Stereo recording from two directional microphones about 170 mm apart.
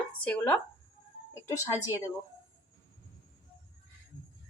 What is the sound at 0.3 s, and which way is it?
A woman's voice, 10° left (ahead or behind).